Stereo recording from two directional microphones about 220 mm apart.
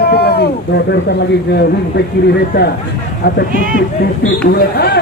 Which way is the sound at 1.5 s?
45° left (ahead or behind).